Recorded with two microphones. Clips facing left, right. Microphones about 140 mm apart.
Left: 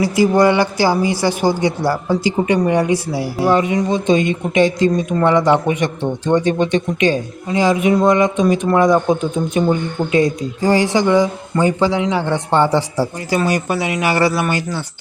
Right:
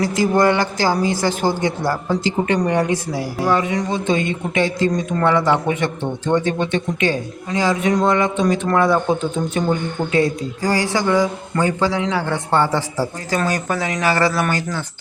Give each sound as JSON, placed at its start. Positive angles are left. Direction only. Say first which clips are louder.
{"t": 0.3, "sound": "speech", "louder": "left 1 dB", "side_deg": 15}